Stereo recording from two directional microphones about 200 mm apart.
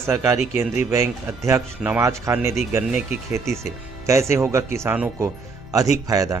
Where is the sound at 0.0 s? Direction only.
15° right (ahead or behind).